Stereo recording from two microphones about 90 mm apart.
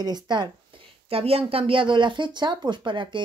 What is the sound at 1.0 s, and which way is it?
Speech, 90° right.